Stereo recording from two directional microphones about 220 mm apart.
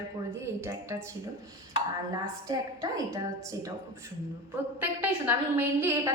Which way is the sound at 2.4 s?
15° right (ahead or behind).